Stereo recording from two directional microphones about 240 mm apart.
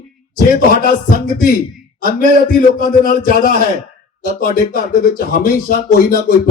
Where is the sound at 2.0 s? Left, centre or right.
Left.